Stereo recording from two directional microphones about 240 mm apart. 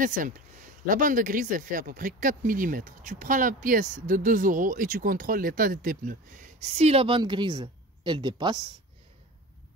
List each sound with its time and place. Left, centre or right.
0.0 s speech: right